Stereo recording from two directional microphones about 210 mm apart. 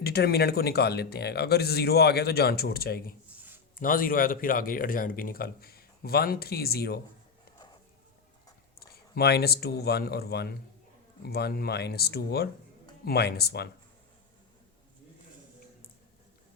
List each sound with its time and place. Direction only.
0.0 s speech: 50° left (ahead or behind)
8.8 s speech: 50° left (ahead or behind)